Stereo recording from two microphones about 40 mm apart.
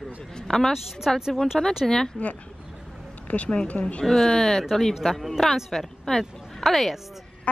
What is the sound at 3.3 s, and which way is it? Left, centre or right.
Speech, left.